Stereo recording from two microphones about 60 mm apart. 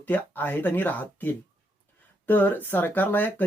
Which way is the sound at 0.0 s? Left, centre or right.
Left.